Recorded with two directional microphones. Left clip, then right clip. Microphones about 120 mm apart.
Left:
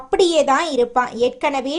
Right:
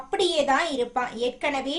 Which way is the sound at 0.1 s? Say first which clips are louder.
Left 7 dB; 50° left (ahead or behind).